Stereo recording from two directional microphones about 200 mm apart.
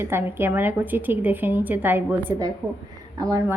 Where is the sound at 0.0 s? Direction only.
10° right (ahead or behind).